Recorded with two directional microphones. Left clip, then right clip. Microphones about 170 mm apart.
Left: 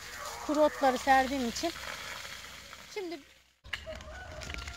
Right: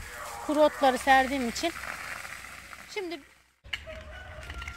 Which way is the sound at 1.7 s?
60° left (ahead or behind).